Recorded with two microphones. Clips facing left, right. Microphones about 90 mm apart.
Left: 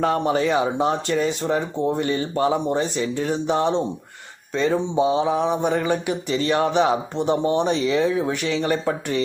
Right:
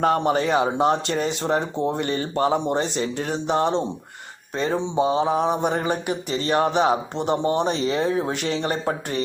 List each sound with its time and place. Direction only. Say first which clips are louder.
0.0 s speech: even; 45° right (ahead or behind)
2.6 s speech: left 1 dB; 60° right (ahead or behind)
4.5 s speech: left 2 dB; 40° right (ahead or behind)
8.6 s speech: left 2 dB; 40° right (ahead or behind)